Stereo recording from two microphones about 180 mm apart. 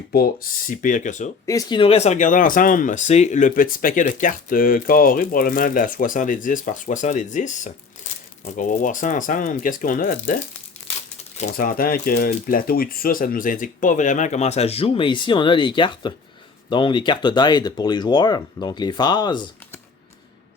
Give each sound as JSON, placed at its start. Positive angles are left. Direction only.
{"t": 0.1, "sound": "speech", "side_deg": 55}
{"t": 0.7, "sound": "speech", "side_deg": 45}
{"t": 1.5, "sound": "speech", "side_deg": 20}
{"t": 1.8, "sound": "speech", "side_deg": 35}
{"t": 11.3, "sound": "speech", "side_deg": 45}